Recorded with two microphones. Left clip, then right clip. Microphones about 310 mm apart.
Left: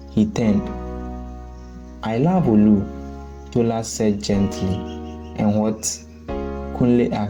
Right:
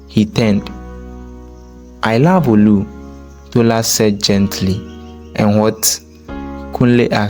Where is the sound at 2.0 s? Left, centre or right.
Right.